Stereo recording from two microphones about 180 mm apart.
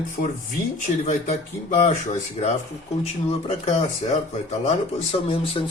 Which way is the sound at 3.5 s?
35° left (ahead or behind).